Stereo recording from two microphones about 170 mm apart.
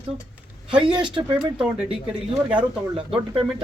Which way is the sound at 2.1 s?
5° right (ahead or behind).